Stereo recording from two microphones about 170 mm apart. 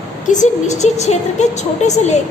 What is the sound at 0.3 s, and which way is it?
A woman's voice, 45° left (ahead or behind).